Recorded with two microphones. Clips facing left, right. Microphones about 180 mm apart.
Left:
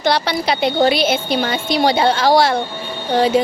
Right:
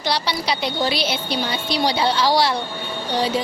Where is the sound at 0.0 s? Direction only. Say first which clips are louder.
Left 6 dB; 50° left (ahead or behind).